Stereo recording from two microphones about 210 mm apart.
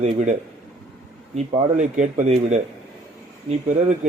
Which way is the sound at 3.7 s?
40° right (ahead or behind).